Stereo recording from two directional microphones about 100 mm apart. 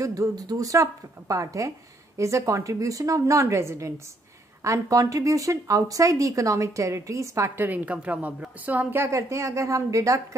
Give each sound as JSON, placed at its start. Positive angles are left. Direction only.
{"t": 0.0, "sound": "speech", "side_deg": -35}
{"t": 9.0, "sound": "speech", "side_deg": -30}